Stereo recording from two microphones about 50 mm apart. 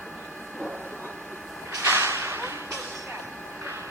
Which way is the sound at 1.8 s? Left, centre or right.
Right.